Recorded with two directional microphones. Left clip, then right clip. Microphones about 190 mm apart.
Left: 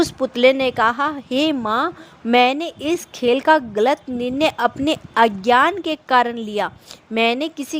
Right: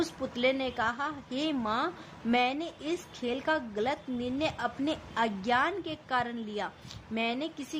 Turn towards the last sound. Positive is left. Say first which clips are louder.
# left 14 dB
turn(degrees=55)  # may be behind; listen again after turning